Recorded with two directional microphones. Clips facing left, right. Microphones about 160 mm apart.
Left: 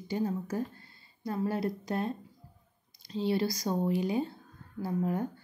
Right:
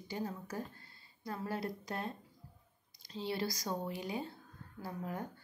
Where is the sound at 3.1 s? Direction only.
20° left (ahead or behind).